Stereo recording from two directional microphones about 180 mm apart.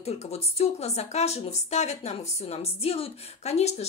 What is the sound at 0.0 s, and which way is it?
Speech, 35° left (ahead or behind).